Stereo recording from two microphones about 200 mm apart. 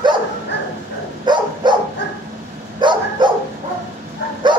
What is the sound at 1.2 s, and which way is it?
Dog, 20° right (ahead or behind).